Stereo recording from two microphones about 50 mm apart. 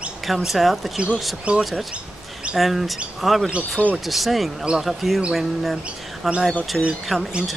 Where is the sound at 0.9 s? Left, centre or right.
Right.